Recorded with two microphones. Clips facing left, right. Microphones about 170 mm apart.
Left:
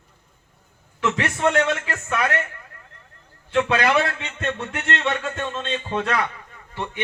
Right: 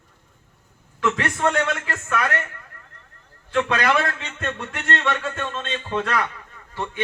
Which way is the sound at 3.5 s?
20° left (ahead or behind).